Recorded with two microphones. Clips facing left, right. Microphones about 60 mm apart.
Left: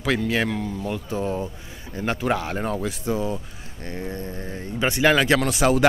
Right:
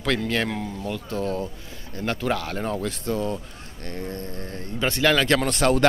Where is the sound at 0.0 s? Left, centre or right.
Centre.